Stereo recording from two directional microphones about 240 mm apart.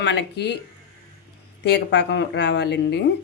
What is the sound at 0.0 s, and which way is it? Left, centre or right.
Speech, left.